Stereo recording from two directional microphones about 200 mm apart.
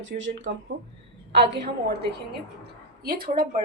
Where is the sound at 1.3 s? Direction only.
55° right (ahead or behind).